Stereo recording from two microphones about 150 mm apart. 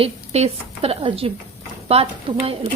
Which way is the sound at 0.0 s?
40° right (ahead or behind).